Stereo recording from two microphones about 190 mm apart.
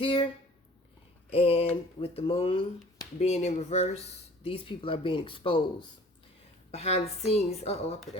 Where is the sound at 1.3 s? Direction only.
30° left (ahead or behind).